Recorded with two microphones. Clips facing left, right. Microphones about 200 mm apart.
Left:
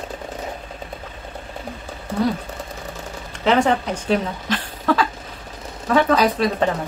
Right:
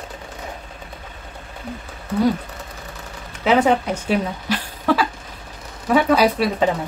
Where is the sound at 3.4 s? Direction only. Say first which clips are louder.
Right 1 dB; 5° right (ahead or behind).